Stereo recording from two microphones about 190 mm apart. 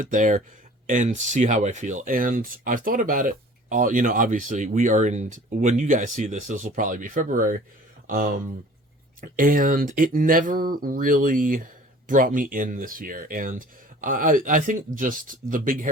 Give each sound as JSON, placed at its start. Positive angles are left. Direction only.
{"t": 0.0, "sound": "speech", "side_deg": -45}